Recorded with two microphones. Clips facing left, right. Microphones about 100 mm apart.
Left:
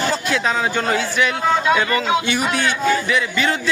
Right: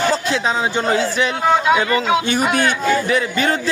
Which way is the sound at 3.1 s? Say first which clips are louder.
Right 2 dB; 40° right (ahead or behind).